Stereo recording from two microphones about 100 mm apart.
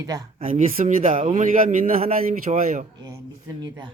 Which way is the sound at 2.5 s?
90° right.